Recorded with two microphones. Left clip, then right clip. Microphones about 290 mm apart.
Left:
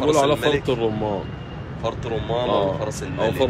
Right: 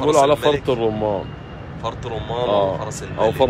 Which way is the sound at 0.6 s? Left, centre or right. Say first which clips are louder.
Right 3 dB; right.